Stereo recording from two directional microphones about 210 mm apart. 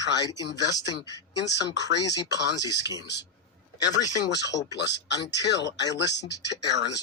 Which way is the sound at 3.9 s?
15° left (ahead or behind).